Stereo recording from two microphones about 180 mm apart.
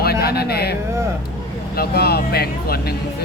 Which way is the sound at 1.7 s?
60° left (ahead or behind).